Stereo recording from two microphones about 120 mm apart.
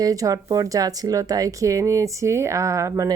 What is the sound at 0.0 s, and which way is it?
Speech, 30° right (ahead or behind).